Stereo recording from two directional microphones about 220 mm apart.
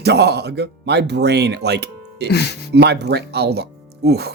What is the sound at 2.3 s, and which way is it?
Speech, 50° left (ahead or behind).